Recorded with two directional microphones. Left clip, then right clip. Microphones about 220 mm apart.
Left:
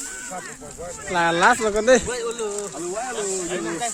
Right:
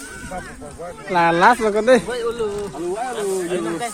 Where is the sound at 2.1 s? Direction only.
50° left (ahead or behind).